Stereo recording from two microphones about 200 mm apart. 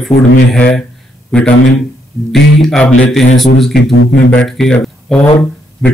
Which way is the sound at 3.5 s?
55° left (ahead or behind).